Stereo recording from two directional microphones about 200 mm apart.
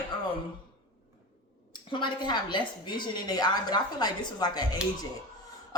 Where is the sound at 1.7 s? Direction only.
20° left (ahead or behind).